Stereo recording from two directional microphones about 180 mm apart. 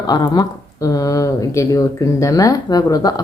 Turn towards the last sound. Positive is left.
turn(degrees=20)  # may be behind; listen again after turning